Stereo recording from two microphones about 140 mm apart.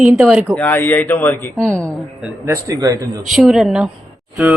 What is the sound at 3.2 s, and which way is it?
Speech, centre (ahead or behind).